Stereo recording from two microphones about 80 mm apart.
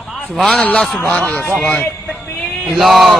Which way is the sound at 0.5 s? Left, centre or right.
Centre.